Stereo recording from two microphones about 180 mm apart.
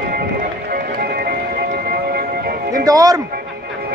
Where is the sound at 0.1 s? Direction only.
55° right (ahead or behind).